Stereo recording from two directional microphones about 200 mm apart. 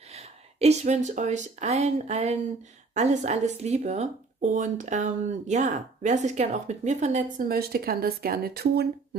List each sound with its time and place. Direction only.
0.1 s speech: 35° right (ahead or behind); by 8.8 s 50° right (ahead or behind)